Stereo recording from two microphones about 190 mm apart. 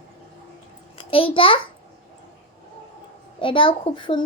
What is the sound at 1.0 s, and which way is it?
Speech, 30° left (ahead or behind).